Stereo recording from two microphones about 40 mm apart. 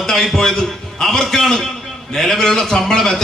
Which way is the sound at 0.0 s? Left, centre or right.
Centre.